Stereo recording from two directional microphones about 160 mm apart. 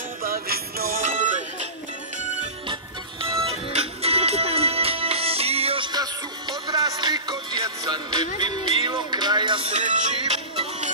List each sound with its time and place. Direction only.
0.2 s music: 70° right (ahead or behind); by 1.7 s 50° right (ahead or behind)
2.7 s music: 30° right (ahead or behind); by 10.1 s 50° right (ahead or behind)
10.5 s music: 35° right (ahead or behind)